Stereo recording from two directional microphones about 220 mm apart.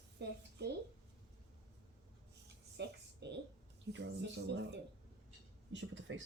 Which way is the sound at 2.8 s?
50° right (ahead or behind).